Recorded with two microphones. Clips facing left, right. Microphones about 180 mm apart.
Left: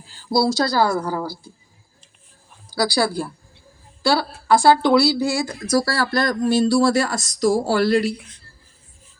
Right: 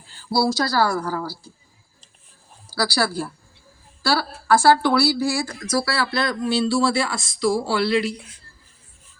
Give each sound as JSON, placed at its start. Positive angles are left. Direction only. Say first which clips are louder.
{"t": 0.3, "sound": "speech", "louder": "left 2 dB", "side_deg": 20}
{"t": 2.6, "sound": "speech", "louder": "left 3 dB", "side_deg": 15}
{"t": 5.7, "sound": "speech", "louder": "left 3 dB", "side_deg": 40}